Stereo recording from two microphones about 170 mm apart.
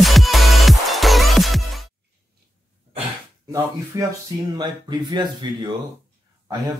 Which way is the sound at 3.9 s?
20° right (ahead or behind).